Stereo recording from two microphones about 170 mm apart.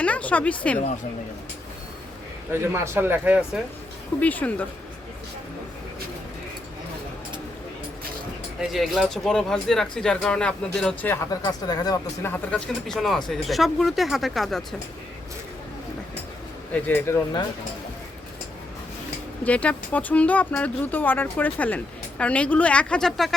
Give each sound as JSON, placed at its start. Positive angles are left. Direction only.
{"t": 0.0, "sound": "a sound", "side_deg": 10}
{"t": 2.5, "sound": "speech", "side_deg": -15}
{"t": 4.2, "sound": "speech", "side_deg": 10}
{"t": 8.6, "sound": "speech", "side_deg": 0}
{"t": 11.3, "sound": "speech", "side_deg": 25}
{"t": 12.3, "sound": "speech", "side_deg": 5}
{"t": 16.8, "sound": "speech", "side_deg": 10}
{"t": 19.5, "sound": "speech", "side_deg": 10}